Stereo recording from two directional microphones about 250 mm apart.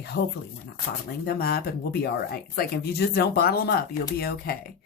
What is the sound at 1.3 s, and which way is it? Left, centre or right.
Speech, left.